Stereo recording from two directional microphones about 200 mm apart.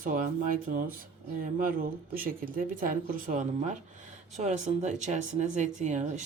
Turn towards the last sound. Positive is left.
turn(degrees=-35)  # may be behind; listen again after turning